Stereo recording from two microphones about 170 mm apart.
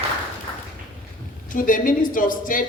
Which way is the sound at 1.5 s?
50° left (ahead or behind).